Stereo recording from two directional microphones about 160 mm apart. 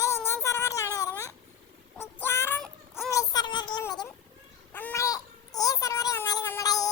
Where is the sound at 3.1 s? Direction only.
20° left (ahead or behind).